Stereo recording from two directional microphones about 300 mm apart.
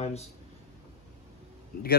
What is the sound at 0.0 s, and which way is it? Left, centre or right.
Speech, left.